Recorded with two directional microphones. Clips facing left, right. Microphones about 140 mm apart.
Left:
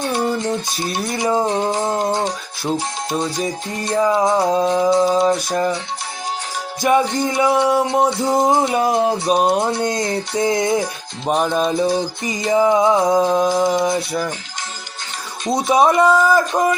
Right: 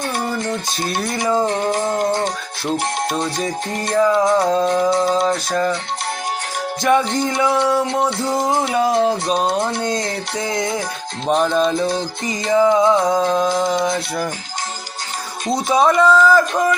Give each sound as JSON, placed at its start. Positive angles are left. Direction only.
{"t": 0.1, "sound": "music", "side_deg": 20}
{"t": 3.8, "sound": "music", "side_deg": 20}
{"t": 6.8, "sound": "music", "side_deg": 5}
{"t": 7.2, "sound": "music", "side_deg": 20}
{"t": 9.2, "sound": "music", "side_deg": 10}
{"t": 11.3, "sound": "music", "side_deg": 10}
{"t": 15.5, "sound": "music", "side_deg": 20}